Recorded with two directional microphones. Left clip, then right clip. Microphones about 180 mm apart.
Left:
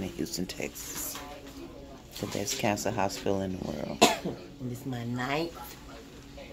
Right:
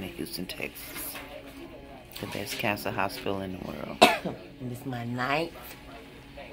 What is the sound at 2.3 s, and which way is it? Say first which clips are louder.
Speech: even; 25° left (ahead or behind).